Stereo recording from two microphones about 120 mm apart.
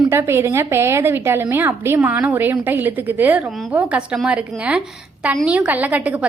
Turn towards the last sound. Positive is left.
turn(degrees=-10)  # may be behind; listen again after turning